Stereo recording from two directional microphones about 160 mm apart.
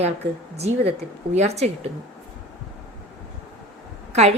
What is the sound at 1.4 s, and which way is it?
Speech, 40° right (ahead or behind).